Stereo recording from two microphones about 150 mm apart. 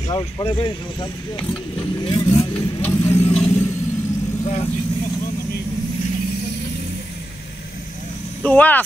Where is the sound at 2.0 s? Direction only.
30° left (ahead or behind).